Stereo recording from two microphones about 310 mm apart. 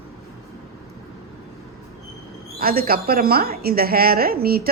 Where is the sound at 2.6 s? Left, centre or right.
Right.